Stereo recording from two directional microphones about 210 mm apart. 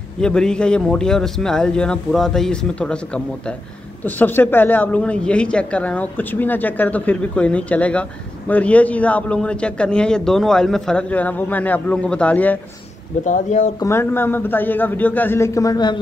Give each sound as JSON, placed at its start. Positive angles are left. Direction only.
{"t": 0.2, "sound": "a man's voice", "side_deg": 5}
{"t": 13.2, "sound": "speech", "side_deg": 35}
{"t": 13.7, "sound": "a man's voice", "side_deg": 10}